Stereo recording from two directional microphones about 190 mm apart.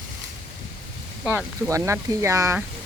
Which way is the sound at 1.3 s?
15° right (ahead or behind).